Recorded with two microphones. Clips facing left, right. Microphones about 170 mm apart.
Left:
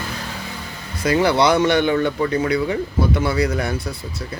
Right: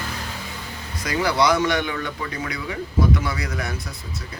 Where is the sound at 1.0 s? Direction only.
30° left (ahead or behind).